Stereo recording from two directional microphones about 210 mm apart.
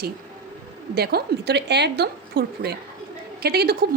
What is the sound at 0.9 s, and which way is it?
A woman's voice, 50° right (ahead or behind).